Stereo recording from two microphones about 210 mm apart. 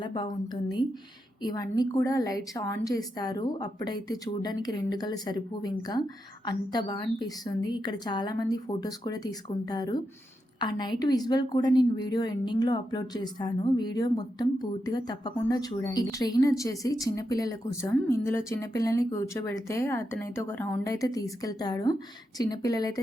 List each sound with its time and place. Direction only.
0.0 s a woman's voice: 20° left (ahead or behind)